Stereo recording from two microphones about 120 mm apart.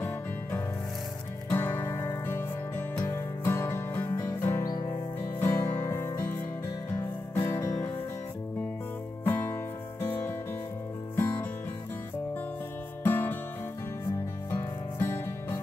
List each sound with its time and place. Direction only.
1.5 s music: 20° left (ahead or behind)
9.2 s music: 20° left (ahead or behind)
13.0 s music: 15° left (ahead or behind)
14.5 s music: 20° left (ahead or behind)